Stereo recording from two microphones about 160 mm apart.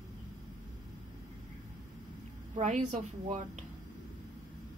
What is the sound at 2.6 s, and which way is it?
Speech, 45° right (ahead or behind).